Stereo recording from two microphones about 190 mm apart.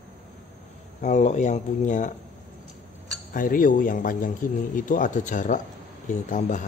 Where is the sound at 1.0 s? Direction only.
40° left (ahead or behind).